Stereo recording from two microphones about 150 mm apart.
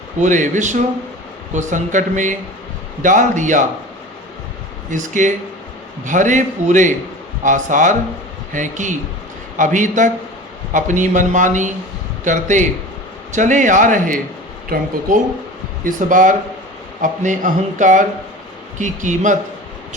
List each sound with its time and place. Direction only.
0.2 s a man's voice: 55° right (ahead or behind)
4.9 s a man's voice: 55° right (ahead or behind)
14.7 s speech: 75° right (ahead or behind)
15.8 s a man's voice: 60° right (ahead or behind)